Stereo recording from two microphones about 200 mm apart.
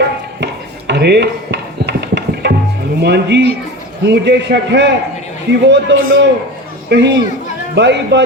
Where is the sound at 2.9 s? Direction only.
55° right (ahead or behind).